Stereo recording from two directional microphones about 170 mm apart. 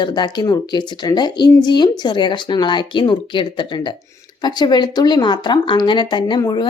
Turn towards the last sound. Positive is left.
turn(degrees=25)  # may be behind; listen again after turning